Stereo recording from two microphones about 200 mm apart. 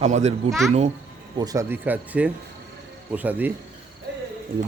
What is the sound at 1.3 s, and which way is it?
Speech, 15° right (ahead or behind).